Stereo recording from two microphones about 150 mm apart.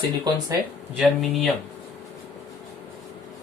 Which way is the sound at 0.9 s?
Centre (ahead or behind).